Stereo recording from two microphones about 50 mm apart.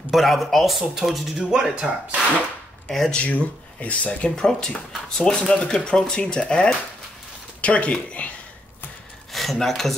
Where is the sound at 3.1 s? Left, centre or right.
Left.